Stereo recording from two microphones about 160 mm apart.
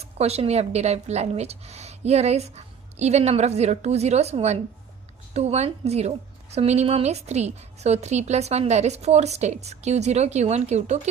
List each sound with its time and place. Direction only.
0.0 s a woman's voice: 40° right (ahead or behind)